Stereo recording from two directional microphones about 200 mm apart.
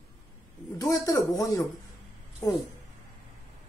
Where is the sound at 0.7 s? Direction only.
20° left (ahead or behind).